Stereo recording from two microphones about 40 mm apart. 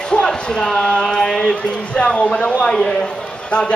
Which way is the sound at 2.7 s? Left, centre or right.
Centre.